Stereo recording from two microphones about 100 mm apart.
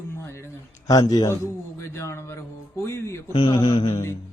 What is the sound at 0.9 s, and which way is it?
Speech, 40° left (ahead or behind).